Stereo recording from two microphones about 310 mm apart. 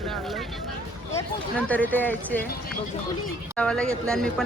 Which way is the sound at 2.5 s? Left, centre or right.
Left.